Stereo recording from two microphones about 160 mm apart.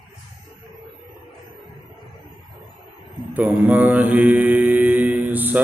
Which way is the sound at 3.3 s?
10° right (ahead or behind).